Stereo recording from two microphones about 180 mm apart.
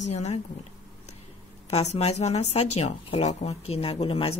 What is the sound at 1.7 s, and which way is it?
A woman's voice, 35° left (ahead or behind).